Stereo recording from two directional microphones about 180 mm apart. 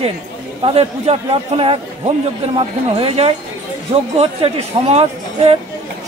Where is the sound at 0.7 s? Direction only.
35° right (ahead or behind).